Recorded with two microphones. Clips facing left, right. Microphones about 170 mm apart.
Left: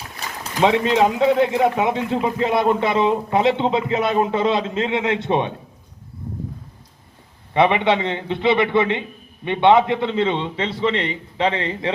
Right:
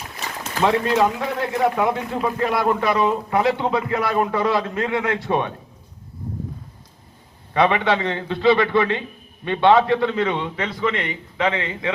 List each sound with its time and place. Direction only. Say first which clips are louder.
0.6 s a man's voice: left 2 dB; 20° left (ahead or behind)
7.5 s a man's voice: left 2 dB; 20° left (ahead or behind)